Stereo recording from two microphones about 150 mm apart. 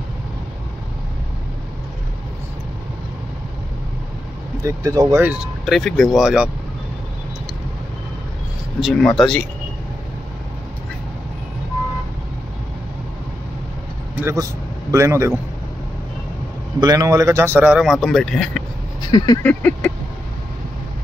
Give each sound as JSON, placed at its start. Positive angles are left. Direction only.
{"t": 4.6, "sound": "speech", "side_deg": -20}
{"t": 5.2, "sound": "a man's voice", "side_deg": -10}
{"t": 8.8, "sound": "speech", "side_deg": 0}
{"t": 14.2, "sound": "speech", "side_deg": -20}
{"t": 16.8, "sound": "a man's voice", "side_deg": -20}
{"t": 19.0, "sound": "speech", "side_deg": 30}
{"t": 19.4, "sound": "a sound", "side_deg": 10}